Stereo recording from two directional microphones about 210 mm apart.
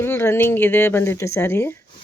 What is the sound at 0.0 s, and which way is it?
Speech, 10° left (ahead or behind).